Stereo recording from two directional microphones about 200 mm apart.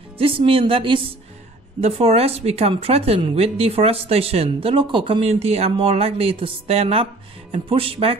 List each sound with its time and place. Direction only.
0.2 s a woman's voice: 25° right (ahead or behind)